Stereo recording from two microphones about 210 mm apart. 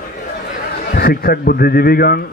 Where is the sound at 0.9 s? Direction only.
45° left (ahead or behind).